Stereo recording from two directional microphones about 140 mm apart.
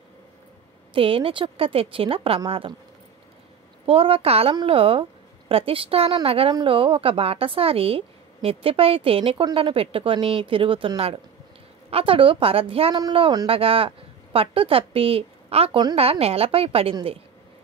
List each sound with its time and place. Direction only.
0.9 s speech: 40° right (ahead or behind)
3.8 s a woman's voice: 40° right (ahead or behind)